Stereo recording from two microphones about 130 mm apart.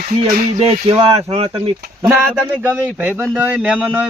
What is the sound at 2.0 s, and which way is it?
Speech, 20° right (ahead or behind).